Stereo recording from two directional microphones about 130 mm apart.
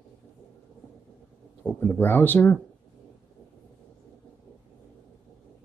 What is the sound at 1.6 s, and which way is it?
Speech, 10° left (ahead or behind).